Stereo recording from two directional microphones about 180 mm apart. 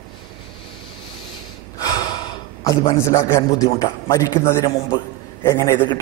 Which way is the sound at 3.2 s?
20° left (ahead or behind).